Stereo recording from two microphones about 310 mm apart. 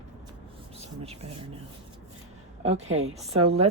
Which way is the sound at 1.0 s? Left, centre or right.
Centre.